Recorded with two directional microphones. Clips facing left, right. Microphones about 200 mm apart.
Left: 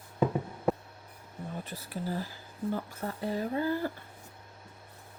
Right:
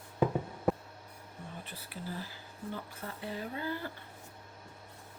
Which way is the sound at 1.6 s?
45° left (ahead or behind).